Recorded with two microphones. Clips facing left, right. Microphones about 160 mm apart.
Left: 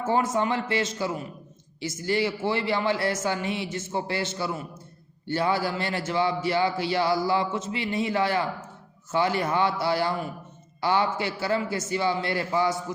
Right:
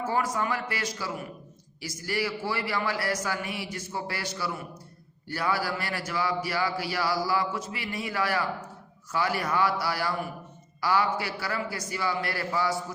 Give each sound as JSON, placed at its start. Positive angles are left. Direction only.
{"t": 0.0, "sound": "speech", "side_deg": 25}